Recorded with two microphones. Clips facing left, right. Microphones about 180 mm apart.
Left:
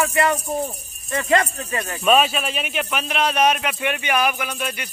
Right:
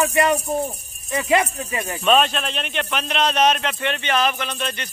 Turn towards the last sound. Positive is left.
turn(degrees=10)  # may be behind; listen again after turning